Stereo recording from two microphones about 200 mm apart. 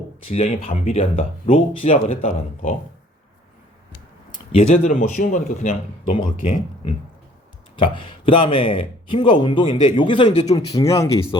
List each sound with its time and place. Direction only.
0.3 s speech: 30° left (ahead or behind)
4.5 s speech: 35° left (ahead or behind)
6.8 s speech: 25° left (ahead or behind)